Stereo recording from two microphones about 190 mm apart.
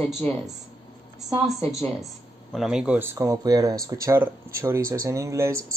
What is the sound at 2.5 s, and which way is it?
Speech, centre (ahead or behind).